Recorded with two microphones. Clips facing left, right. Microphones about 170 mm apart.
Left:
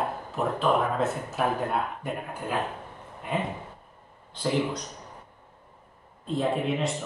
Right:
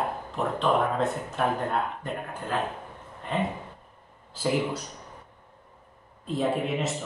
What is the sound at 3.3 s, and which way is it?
Speech, 10° left (ahead or behind).